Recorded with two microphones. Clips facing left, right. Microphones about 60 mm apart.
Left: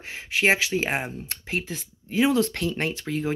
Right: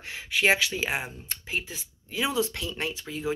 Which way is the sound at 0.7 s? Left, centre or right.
Left.